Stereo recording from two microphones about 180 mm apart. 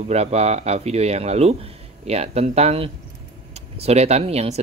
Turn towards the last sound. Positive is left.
turn(degrees=-35)  # may be behind; listen again after turning